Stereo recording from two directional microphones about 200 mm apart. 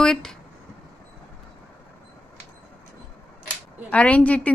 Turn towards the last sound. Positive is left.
turn(degrees=5)  # may be behind; listen again after turning